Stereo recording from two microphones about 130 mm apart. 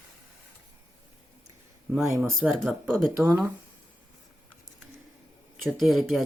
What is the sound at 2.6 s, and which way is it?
Speech, 5° left (ahead or behind).